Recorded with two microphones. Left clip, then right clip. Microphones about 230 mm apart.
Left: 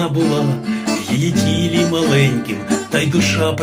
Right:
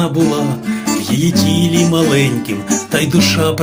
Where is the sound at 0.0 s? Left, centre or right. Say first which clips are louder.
Right 2 dB; right.